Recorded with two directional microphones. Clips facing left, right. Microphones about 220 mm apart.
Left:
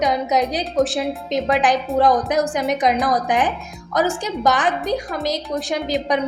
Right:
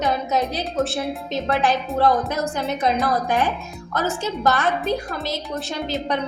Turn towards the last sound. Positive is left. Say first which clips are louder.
# left 4 dB
turn(degrees=15)  # may be behind; listen again after turning